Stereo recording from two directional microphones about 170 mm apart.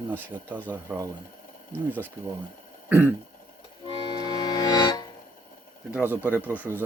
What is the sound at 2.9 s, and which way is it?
Throat clearing, 15° right (ahead or behind).